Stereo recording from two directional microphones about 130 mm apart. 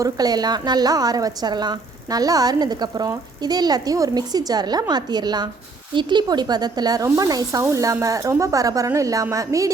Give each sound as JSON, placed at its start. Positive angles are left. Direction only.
{"t": 0.0, "sound": "a woman's voice", "side_deg": -30}